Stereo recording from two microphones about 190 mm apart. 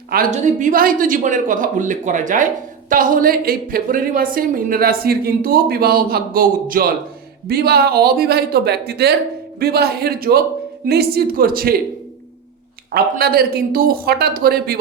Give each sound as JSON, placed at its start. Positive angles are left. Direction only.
{"t": 0.3, "sound": "speech", "side_deg": -40}
{"t": 12.9, "sound": "speech", "side_deg": -55}